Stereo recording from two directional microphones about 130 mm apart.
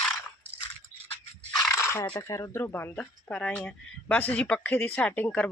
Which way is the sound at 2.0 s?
35° left (ahead or behind).